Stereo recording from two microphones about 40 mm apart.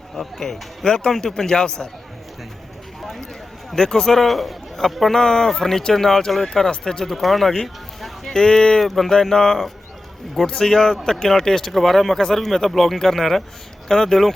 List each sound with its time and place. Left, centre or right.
0.2 s speech: centre
0.9 s speech: centre
3.0 s a sound: centre
3.7 s speech: centre
5.2 s speech: centre
7.0 s speech: centre
8.4 s speech: centre
8.8 s speech: centre